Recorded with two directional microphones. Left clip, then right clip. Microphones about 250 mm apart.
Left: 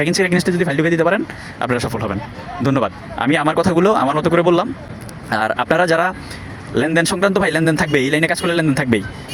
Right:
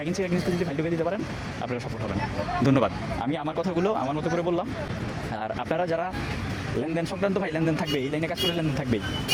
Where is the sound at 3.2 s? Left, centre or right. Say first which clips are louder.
Left 14 dB; left.